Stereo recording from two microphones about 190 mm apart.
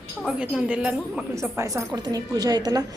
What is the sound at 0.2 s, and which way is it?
A woman's voice, centre (ahead or behind).